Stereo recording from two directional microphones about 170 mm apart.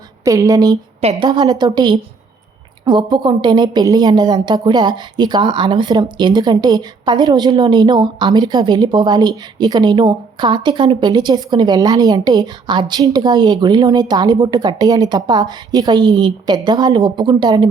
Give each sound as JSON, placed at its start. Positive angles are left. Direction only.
{"t": 0.3, "sound": "a woman's voice", "side_deg": -20}